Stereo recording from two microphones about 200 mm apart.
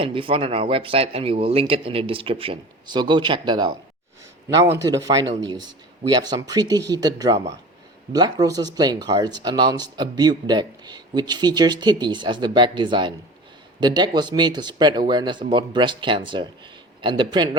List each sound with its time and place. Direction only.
0.0 s a man's voice: 25° right (ahead or behind)